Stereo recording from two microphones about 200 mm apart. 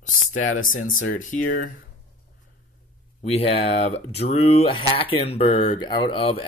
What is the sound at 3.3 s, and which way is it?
Speech, 30° left (ahead or behind).